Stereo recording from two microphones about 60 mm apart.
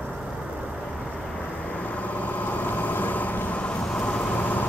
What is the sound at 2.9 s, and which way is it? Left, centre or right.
Vehicle, left.